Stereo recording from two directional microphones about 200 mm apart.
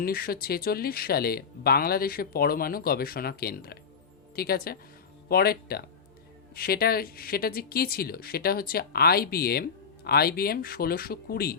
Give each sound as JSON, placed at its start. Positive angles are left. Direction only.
{"t": 0.0, "sound": "speech", "side_deg": 50}